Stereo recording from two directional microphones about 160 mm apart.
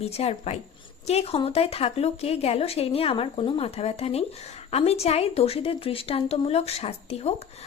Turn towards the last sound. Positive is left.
turn(degrees=40)  # may be behind; listen again after turning